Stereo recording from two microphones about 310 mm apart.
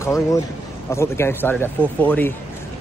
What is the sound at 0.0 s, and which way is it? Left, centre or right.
Speech, centre.